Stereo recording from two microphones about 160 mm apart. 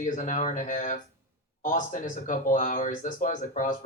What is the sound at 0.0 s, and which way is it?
Speech, 50° left (ahead or behind).